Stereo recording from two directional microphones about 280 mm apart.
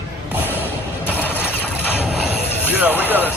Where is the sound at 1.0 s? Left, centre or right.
Centre.